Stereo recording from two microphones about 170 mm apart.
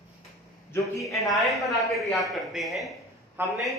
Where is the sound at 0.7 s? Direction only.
20° left (ahead or behind).